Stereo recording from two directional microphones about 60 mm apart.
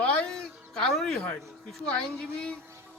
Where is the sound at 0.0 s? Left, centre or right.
Centre.